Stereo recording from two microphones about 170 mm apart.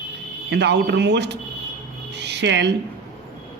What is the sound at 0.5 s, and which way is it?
Speech, 85° right.